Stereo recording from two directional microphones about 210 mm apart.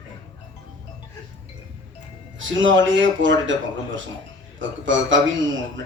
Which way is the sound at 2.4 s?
65° right (ahead or behind).